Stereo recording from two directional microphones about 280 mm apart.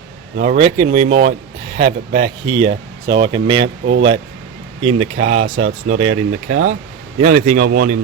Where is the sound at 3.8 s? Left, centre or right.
Right.